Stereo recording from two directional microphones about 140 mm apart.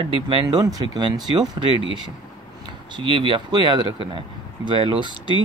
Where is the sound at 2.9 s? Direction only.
35° right (ahead or behind).